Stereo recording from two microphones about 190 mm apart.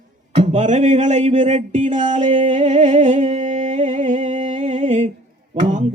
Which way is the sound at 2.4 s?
40° right (ahead or behind).